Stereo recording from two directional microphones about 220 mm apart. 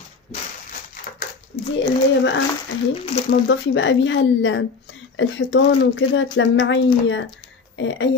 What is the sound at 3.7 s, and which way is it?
A woman's voice, 55° left (ahead or behind).